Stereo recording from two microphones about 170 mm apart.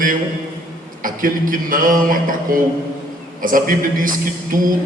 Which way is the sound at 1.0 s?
55° right (ahead or behind).